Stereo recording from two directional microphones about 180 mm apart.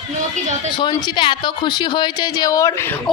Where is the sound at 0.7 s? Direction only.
25° left (ahead or behind).